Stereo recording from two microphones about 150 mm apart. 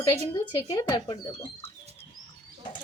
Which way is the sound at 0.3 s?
30° left (ahead or behind).